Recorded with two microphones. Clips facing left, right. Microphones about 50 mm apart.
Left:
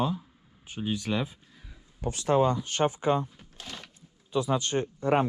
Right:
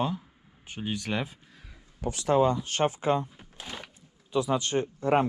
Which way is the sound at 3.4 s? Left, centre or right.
Centre.